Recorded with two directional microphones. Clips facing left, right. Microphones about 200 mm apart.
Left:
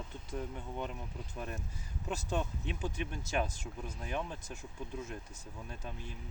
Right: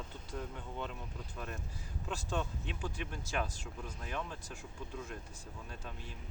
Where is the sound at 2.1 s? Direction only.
20° left (ahead or behind).